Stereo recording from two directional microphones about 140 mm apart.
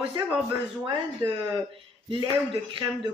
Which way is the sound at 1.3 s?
35° right (ahead or behind).